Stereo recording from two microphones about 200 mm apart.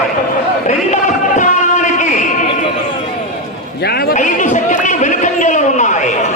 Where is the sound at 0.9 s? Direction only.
40° left (ahead or behind).